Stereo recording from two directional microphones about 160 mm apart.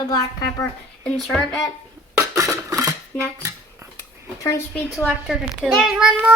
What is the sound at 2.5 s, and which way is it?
Dishes, 20° right (ahead or behind).